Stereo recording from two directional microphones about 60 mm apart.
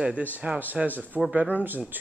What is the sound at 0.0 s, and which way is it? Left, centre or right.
Speech, right.